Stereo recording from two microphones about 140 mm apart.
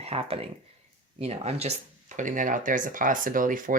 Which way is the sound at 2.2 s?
65° right (ahead or behind).